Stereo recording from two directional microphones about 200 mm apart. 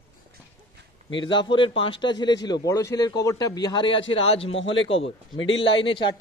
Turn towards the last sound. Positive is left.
turn(degrees=25)  # may be behind; listen again after turning